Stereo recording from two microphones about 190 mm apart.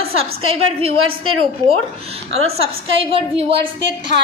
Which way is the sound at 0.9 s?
90° right.